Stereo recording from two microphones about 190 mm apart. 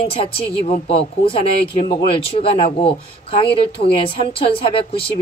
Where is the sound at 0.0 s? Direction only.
30° left (ahead or behind).